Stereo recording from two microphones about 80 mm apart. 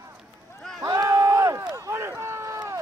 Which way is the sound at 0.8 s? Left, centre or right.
Right.